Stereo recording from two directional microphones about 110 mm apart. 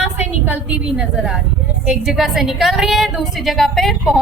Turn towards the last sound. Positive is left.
turn(degrees=0)  # may be behind; listen again after turning